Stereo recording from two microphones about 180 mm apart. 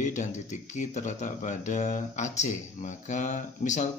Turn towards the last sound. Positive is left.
turn(degrees=40)  # may be behind; listen again after turning